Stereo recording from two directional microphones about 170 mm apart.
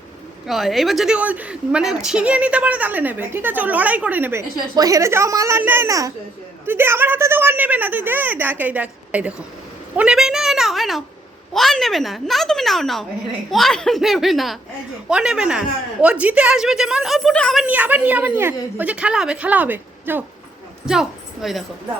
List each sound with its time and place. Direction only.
0.4 s a woman's voice: centre (ahead or behind)
9.9 s a sound: 5° right (ahead or behind)
11.5 s a woman's voice: centre (ahead or behind)